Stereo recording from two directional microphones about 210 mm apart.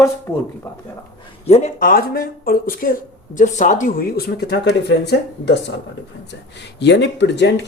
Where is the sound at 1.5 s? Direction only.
30° left (ahead or behind); by 5.7 s 50° left (ahead or behind).